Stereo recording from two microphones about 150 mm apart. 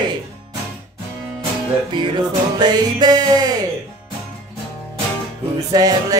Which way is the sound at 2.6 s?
30° right (ahead or behind).